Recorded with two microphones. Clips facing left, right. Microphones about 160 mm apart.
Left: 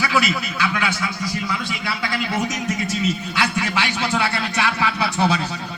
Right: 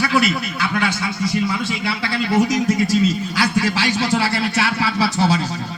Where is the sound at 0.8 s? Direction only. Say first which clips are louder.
Right 3 dB; 25° right (ahead or behind).